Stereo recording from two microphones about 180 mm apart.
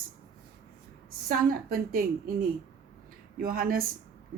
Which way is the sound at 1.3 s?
55° right (ahead or behind).